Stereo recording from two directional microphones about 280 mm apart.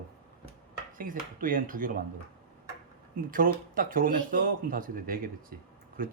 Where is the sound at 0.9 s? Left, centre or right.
Right.